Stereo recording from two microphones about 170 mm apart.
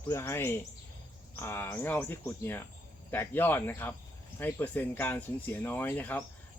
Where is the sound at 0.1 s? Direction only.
15° left (ahead or behind).